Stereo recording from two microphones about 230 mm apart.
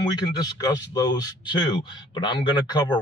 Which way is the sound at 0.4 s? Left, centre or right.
Centre.